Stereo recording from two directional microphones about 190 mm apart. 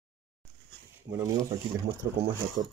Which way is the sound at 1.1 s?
20° right (ahead or behind).